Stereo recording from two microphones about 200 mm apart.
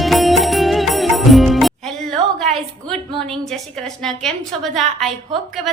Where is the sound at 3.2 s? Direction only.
Centre (ahead or behind).